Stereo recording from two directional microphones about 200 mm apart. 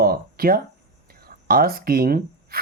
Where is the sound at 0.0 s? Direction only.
50° right (ahead or behind).